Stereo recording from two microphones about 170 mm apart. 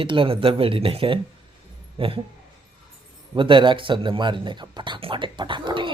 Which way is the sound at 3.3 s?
30° right (ahead or behind).